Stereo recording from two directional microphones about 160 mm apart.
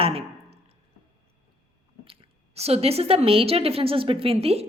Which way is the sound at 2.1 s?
40° right (ahead or behind).